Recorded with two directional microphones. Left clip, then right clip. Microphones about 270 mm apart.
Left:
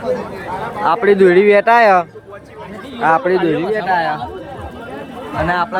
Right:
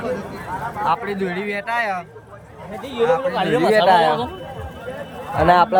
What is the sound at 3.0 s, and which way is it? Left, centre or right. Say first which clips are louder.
Speech: left 5 dB; right.